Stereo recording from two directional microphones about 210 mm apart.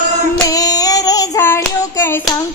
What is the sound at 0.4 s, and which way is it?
Hands, 15° left (ahead or behind).